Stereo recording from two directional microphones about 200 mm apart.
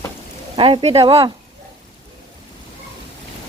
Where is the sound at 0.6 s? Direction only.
30° right (ahead or behind).